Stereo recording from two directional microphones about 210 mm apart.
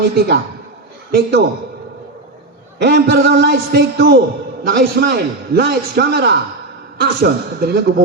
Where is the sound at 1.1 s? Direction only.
50° right (ahead or behind).